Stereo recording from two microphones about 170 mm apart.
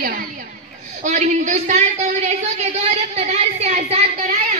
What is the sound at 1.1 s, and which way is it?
A man's voice, 45° right (ahead or behind).